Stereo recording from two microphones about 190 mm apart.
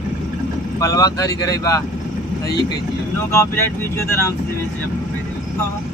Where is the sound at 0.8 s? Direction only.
20° left (ahead or behind).